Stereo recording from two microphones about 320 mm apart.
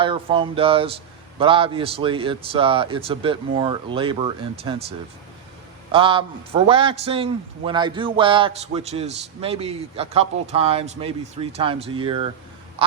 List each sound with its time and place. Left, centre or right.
0.0 s a man's voice: centre